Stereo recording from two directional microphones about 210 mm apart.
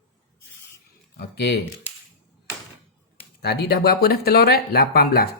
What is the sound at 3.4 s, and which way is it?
Speech, 50° left (ahead or behind).